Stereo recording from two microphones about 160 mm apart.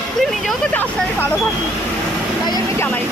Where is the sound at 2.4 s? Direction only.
25° left (ahead or behind).